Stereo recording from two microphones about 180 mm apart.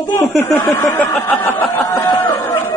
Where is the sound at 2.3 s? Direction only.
15° left (ahead or behind).